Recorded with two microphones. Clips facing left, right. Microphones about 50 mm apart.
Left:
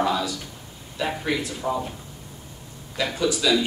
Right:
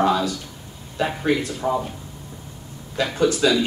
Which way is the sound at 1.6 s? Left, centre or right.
Right.